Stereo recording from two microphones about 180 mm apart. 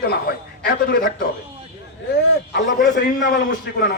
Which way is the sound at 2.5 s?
75° left (ahead or behind).